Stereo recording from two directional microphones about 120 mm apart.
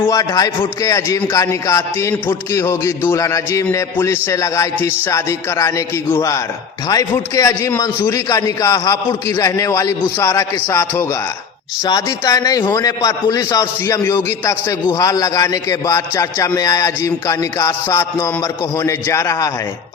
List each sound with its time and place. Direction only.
0.1 s a man's voice: 30° left (ahead or behind)
6.8 s a man's voice: 35° left (ahead or behind)